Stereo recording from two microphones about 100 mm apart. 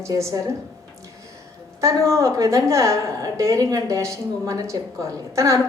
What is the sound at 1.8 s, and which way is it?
A woman's voice, 30° right (ahead or behind).